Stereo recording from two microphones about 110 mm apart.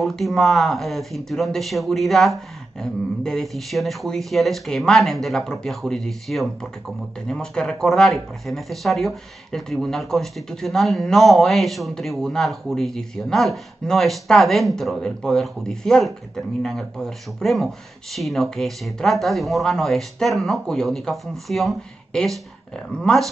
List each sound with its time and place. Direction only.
0.0 s speech: centre (ahead or behind)